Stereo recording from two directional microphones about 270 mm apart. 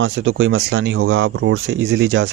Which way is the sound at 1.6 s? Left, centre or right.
Right.